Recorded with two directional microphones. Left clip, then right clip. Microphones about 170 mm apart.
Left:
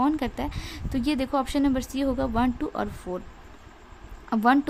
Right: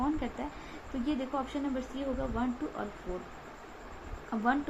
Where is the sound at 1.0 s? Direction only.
50° left (ahead or behind).